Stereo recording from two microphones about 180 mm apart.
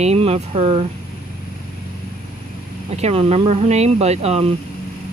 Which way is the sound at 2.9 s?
35° right (ahead or behind).